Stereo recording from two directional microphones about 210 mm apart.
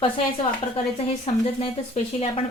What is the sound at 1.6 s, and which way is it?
Speech, 30° left (ahead or behind).